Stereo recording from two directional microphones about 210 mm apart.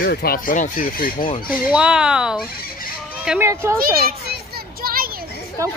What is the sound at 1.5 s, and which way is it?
Speech, 5° right (ahead or behind).